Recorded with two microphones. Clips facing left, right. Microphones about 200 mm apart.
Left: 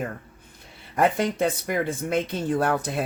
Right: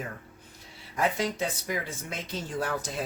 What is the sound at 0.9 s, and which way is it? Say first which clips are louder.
Speech: left 6 dB; 55° left (ahead or behind).